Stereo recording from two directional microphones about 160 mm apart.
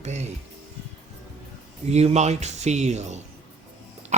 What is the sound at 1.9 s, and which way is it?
Speech, 40° right (ahead or behind).